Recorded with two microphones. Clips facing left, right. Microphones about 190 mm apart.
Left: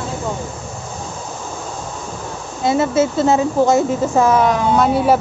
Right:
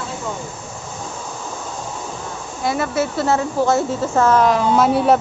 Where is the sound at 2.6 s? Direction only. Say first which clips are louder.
Left 5 dB; 25° left (ahead or behind).